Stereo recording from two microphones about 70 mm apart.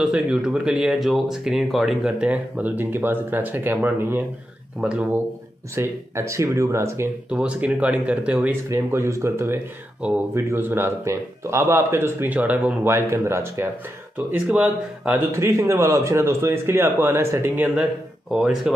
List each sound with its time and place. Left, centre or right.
0.0 s speech: centre
2.1 s speech: centre
4.7 s speech: centre
5.8 s speech: right
7.2 s speech: centre
8.6 s a man's voice: right
12.3 s speech: right
12.8 s a man's voice: right
14.1 s speech: right
15.3 s a man's voice: right
18.3 s speech: centre